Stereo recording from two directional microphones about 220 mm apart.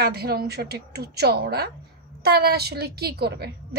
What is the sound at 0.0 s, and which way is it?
A woman's voice, 45° right (ahead or behind).